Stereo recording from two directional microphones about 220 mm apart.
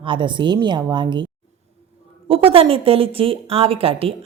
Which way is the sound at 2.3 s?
25° right (ahead or behind).